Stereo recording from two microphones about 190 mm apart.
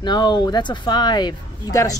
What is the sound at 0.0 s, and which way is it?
Speech, 25° left (ahead or behind).